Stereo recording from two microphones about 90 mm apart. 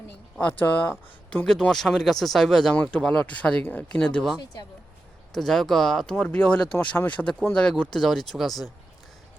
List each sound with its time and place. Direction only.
0.3 s speech: 20° left (ahead or behind)
1.5 s speech: 5° left (ahead or behind)
2.7 s speech: 15° left (ahead or behind)
5.3 s speech: 5° left (ahead or behind)